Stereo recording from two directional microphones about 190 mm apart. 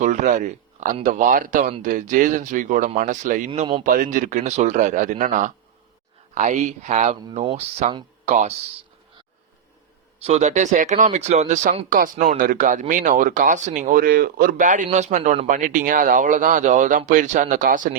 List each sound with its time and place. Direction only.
0.0 s speech: 40° right (ahead or behind)
3.8 s speech: 45° right (ahead or behind)
10.2 s speech: 35° right (ahead or behind)